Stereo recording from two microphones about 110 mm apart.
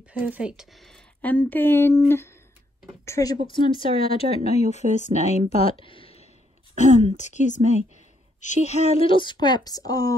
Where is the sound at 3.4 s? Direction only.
50° left (ahead or behind); by 5.4 s 90° left.